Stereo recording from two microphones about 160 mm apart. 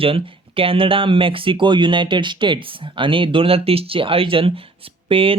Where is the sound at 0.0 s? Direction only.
35° right (ahead or behind).